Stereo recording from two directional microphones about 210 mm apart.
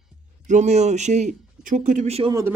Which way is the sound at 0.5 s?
35° right (ahead or behind).